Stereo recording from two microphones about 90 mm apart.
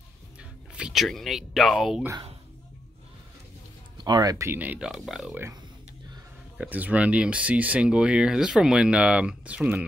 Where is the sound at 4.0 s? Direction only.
50° right (ahead or behind).